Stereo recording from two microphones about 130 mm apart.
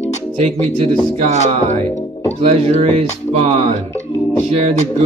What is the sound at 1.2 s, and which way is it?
Speech, 60° right (ahead or behind).